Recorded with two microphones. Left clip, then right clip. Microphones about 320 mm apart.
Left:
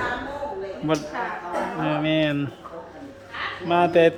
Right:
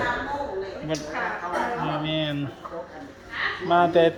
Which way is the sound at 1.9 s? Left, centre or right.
Centre.